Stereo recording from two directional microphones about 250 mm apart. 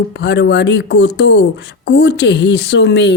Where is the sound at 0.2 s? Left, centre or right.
Left.